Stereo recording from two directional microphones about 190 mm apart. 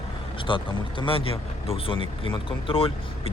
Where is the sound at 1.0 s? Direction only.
30° left (ahead or behind).